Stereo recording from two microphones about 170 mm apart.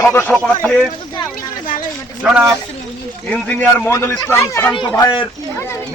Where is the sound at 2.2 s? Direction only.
5° right (ahead or behind).